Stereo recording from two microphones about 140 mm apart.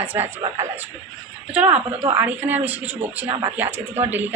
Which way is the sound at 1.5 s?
10° right (ahead or behind).